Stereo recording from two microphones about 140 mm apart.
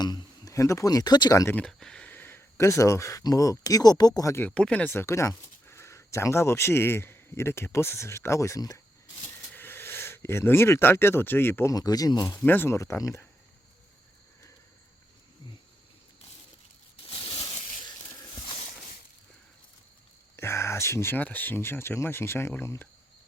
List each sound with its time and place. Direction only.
0.0 s speech: 30° left (ahead or behind)
1.5 s speech: 5° left (ahead or behind); by 4.4 s 25° left (ahead or behind)
4.4 s speech: 10° left (ahead or behind); by 12.4 s 25° left (ahead or behind)
12.4 s speech: 15° left (ahead or behind)
17.1 s a sound: 40° left (ahead or behind)
18.4 s a sound: 45° left (ahead or behind)
20.3 s speech: 20° left (ahead or behind)